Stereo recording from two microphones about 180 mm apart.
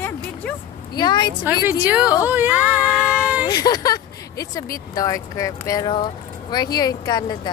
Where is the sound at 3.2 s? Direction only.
10° right (ahead or behind).